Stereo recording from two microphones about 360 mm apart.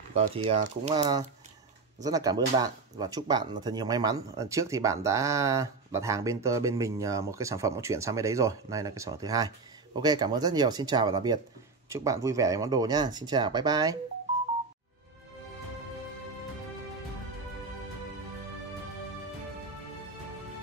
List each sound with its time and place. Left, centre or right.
0.1 s speech: centre